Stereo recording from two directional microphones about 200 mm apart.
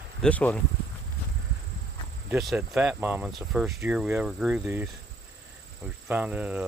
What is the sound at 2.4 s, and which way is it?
Speech, 5° right (ahead or behind).